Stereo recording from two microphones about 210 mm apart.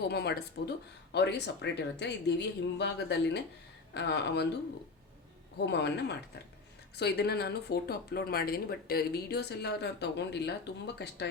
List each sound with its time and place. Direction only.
0.1 s speech: 50° left (ahead or behind)
5.5 s speech: 55° left (ahead or behind)